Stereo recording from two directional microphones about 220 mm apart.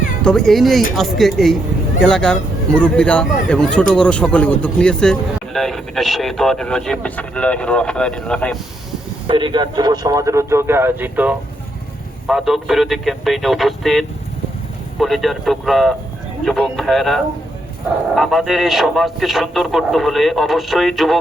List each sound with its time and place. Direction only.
0.2 s speech: centre (ahead or behind)
9.2 s speech: 20° right (ahead or behind); by 21.2 s centre (ahead or behind)